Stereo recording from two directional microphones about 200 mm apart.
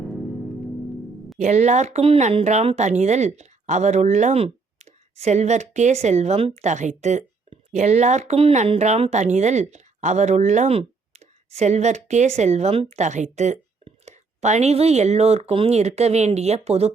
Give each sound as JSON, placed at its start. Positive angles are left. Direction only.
{"t": 1.4, "sound": "speech", "side_deg": -35}